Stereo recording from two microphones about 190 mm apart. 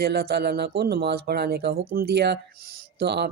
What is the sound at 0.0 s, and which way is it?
Speech, 55° right (ahead or behind).